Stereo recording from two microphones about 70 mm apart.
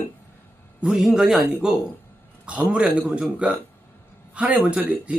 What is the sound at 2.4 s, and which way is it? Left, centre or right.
Speech, centre.